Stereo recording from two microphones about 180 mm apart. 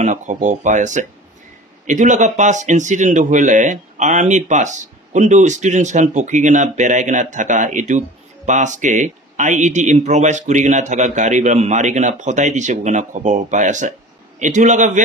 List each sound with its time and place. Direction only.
0.0 s a man's voice: 45° right (ahead or behind)